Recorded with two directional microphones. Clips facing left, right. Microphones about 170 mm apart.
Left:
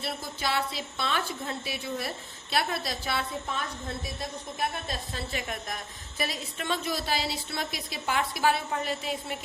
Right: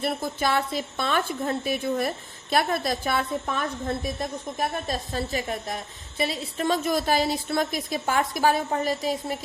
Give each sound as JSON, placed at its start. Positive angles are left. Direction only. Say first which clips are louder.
{"t": 0.0, "sound": "a woman's voice", "louder": "right 7 dB", "side_deg": -50}
{"t": 4.9, "sound": "a woman's voice", "louder": "right 7 dB", "side_deg": -40}